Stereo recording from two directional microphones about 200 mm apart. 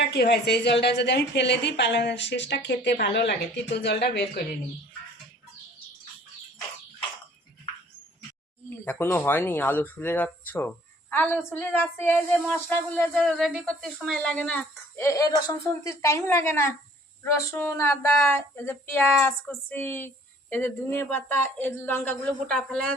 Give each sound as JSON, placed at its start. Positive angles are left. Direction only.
{"t": 0.0, "sound": "a woman's voice", "side_deg": 55}
{"t": 8.8, "sound": "speech", "side_deg": 10}